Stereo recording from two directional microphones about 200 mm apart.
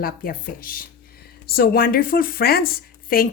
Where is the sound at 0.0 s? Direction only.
45° left (ahead or behind).